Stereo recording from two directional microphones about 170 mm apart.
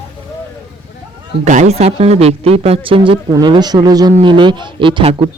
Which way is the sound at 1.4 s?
45° right (ahead or behind).